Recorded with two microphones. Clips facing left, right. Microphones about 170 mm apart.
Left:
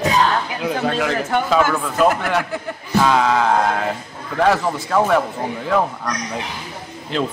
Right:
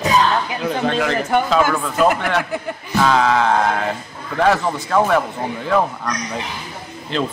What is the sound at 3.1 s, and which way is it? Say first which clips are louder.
A man's voice: right 1 dB; 5° left (ahead or behind).